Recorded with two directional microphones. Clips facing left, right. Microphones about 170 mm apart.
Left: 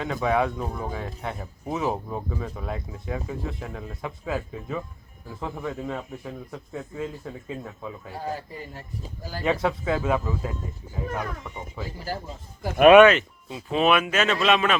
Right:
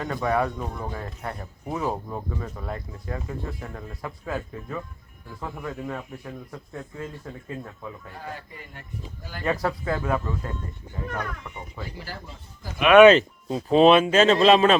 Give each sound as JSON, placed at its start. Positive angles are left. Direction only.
{"t": 0.0, "sound": "speech", "side_deg": 5}
{"t": 8.1, "sound": "speech", "side_deg": 35}
{"t": 9.6, "sound": "speech", "side_deg": 5}
{"t": 12.0, "sound": "speech", "side_deg": 40}
{"t": 12.6, "sound": "speech", "side_deg": 60}
{"t": 13.1, "sound": "speech", "side_deg": -35}